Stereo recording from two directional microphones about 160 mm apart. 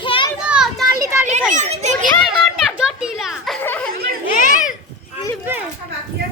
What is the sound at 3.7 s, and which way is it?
Chatter, 10° left (ahead or behind).